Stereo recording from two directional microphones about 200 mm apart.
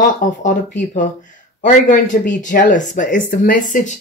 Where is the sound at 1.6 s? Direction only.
40° left (ahead or behind).